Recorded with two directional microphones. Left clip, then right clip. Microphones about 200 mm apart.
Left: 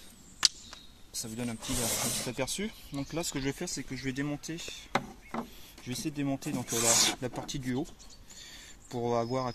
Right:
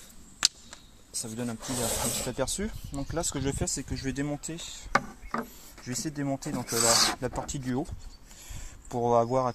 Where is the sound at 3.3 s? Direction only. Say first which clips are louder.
Right 3 dB; 30° right (ahead or behind).